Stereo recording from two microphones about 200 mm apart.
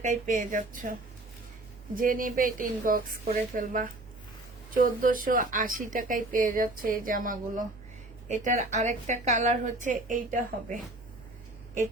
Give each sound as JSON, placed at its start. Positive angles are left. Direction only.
{"t": 0.0, "sound": "speech", "side_deg": -40}
{"t": 2.0, "sound": "speech", "side_deg": -45}